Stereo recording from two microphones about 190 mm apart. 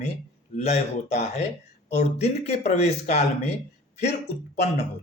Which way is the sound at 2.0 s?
35° left (ahead or behind).